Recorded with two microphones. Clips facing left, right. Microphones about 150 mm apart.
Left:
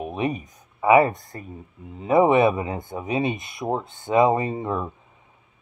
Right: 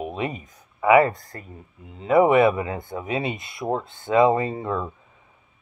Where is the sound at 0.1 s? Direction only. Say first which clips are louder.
Left 3 dB; 20° left (ahead or behind).